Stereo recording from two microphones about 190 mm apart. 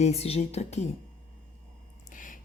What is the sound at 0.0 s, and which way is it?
Speech, 35° left (ahead or behind).